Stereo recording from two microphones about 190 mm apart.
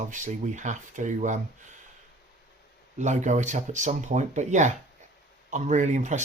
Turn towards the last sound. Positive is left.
turn(degrees=-40)  # may be behind; listen again after turning